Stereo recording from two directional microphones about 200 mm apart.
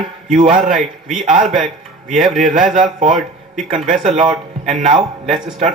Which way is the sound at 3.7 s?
40° right (ahead or behind).